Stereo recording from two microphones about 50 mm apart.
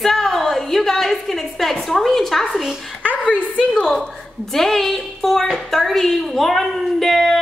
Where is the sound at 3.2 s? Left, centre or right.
Left.